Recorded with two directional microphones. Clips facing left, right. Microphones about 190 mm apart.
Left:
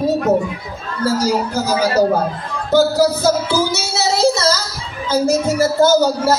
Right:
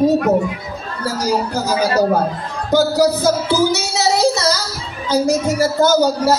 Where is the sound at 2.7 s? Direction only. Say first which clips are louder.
Left 1 dB; 15° right (ahead or behind).